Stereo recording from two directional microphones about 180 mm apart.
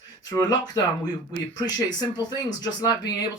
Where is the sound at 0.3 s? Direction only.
20° left (ahead or behind).